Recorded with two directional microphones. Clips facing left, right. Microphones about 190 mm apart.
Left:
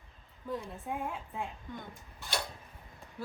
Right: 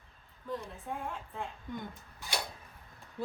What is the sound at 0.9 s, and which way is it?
Speech, 5° left (ahead or behind).